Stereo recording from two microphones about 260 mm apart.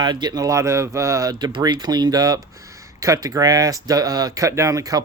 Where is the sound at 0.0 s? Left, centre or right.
Centre.